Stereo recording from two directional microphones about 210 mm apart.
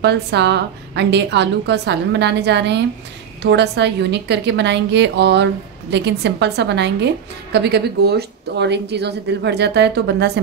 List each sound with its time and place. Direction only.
0.0 s a woman's voice: 55° right (ahead or behind)